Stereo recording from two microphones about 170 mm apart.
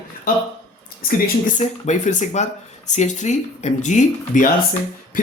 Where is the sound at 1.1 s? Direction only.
60° left (ahead or behind).